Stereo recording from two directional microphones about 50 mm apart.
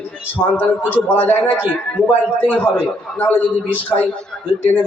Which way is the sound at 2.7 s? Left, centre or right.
Left.